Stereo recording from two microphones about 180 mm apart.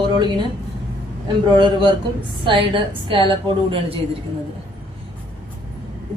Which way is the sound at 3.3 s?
30° right (ahead or behind).